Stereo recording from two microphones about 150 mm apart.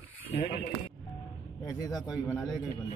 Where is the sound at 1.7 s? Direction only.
25° left (ahead or behind).